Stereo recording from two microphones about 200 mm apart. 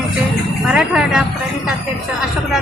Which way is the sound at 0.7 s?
5° right (ahead or behind).